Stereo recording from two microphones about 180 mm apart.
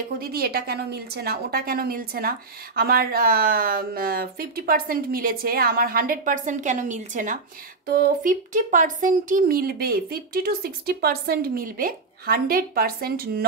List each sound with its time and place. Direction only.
0.2 s a woman's voice: 55° right (ahead or behind)